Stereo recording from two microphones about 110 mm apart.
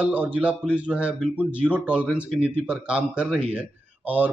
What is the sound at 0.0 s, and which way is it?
Speech, 15° right (ahead or behind).